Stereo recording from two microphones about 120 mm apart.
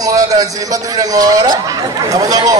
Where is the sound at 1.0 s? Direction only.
30° right (ahead or behind).